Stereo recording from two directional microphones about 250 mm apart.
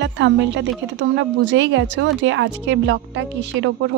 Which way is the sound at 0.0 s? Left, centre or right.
Right.